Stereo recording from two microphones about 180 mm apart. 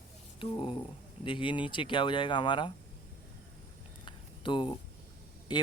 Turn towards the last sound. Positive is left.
turn(degrees=25)  # may be behind; listen again after turning